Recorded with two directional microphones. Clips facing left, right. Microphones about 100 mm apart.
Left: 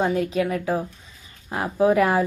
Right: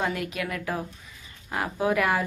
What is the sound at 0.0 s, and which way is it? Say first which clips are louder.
Speech: left 7 dB; 30° left (ahead or behind).